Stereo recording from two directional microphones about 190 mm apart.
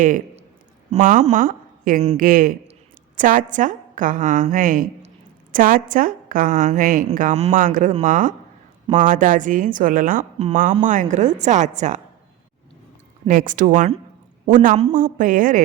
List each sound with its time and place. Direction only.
0.9 s a woman's voice: 40° right (ahead or behind)
13.2 s a woman's voice: 45° right (ahead or behind)